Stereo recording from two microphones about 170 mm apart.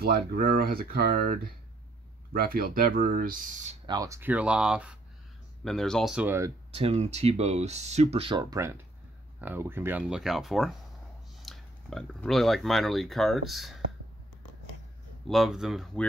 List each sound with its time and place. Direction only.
0.0 s speech: 60° right (ahead or behind)
3.8 s speech: 20° right (ahead or behind)
6.7 s speech: 35° right (ahead or behind); by 13.7 s centre (ahead or behind)
15.2 s speech: centre (ahead or behind)